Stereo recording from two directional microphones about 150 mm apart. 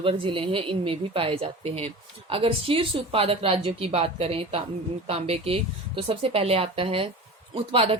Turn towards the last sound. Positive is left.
turn(degrees=-40)  # may be behind; listen again after turning